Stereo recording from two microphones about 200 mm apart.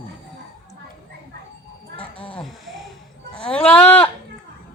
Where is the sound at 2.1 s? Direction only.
5° left (ahead or behind).